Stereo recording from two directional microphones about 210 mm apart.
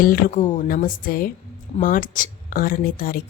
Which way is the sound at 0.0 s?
45° left (ahead or behind).